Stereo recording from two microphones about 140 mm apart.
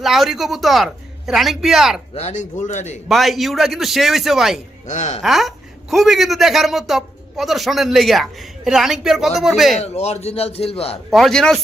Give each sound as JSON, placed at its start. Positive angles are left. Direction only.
{"t": 0.0, "sound": "a man's voice", "side_deg": 0}
{"t": 2.1, "sound": "a man's voice", "side_deg": 55}
{"t": 3.1, "sound": "a man's voice", "side_deg": 0}
{"t": 4.9, "sound": "a man's voice", "side_deg": 60}
{"t": 5.2, "sound": "a man's voice", "side_deg": 0}
{"t": 9.7, "sound": "a man's voice", "side_deg": 50}
{"t": 11.1, "sound": "a man's voice", "side_deg": 0}